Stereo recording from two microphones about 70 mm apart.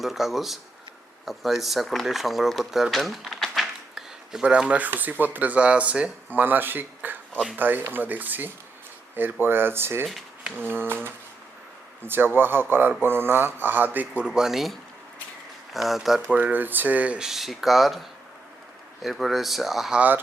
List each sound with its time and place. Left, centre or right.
0.0 s speech: centre
4.8 s speech: right
6.4 s speech: right
9.1 s a sound: right
14.2 s speech: centre
16.3 s speech: right
17.2 s speech: centre
19.0 s speech: centre
20.0 s speech: right